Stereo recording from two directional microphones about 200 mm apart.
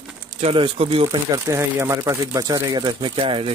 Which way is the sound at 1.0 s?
15° right (ahead or behind).